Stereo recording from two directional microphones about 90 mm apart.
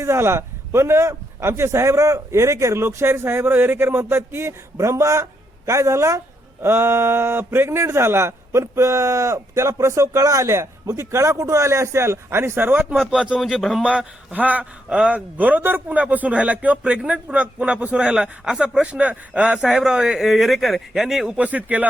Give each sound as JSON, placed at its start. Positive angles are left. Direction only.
{"t": 0.0, "sound": "a man's voice", "side_deg": -30}
{"t": 13.1, "sound": "a man's voice", "side_deg": -10}
{"t": 13.5, "sound": "speech", "side_deg": 0}
{"t": 13.8, "sound": "a man's voice", "side_deg": -10}
{"t": 19.6, "sound": "speech", "side_deg": -5}
{"t": 21.3, "sound": "a man's voice", "side_deg": -15}